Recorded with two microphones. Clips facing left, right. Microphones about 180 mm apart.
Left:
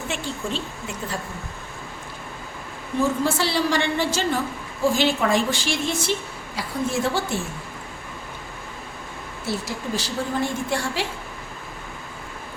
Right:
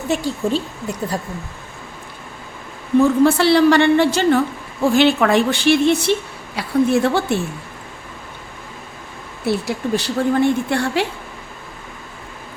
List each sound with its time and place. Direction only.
0.1 s speech: 40° right (ahead or behind)
3.0 s a woman's voice: 60° right (ahead or behind)
9.4 s a woman's voice: 60° right (ahead or behind)